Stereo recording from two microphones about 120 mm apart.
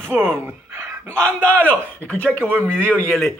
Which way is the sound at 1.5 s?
10° left (ahead or behind).